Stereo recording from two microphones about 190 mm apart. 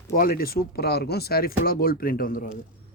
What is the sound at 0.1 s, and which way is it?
Speech, 50° left (ahead or behind).